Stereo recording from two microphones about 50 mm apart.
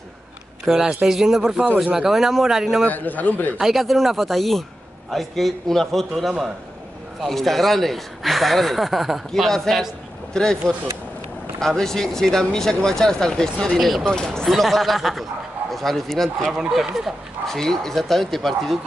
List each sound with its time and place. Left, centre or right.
0.7 s speech: centre
2.8 s a man's voice: left
3.5 s speech: centre
10.3 s speech: centre
11.6 s speech: centre
13.7 s speech: centre
14.0 s speech: centre
16.5 s speech: centre
17.5 s speech: centre